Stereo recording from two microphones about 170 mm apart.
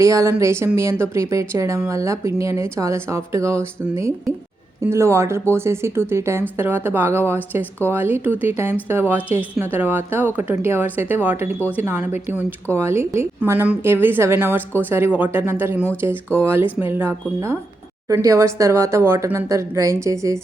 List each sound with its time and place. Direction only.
0.0 s speech: 20° right (ahead or behind)